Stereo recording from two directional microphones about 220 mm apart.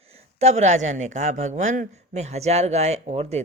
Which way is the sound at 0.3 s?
30° right (ahead or behind).